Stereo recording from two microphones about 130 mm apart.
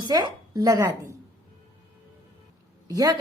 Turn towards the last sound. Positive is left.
turn(degrees=-25)  # may be behind; listen again after turning